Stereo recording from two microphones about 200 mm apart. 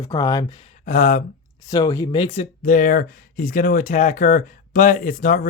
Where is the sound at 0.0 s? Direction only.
25° left (ahead or behind).